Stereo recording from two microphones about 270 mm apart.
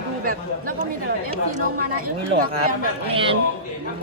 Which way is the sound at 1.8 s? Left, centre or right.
Right.